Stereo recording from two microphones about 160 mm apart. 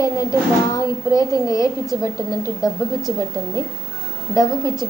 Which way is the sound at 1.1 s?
20° left (ahead or behind).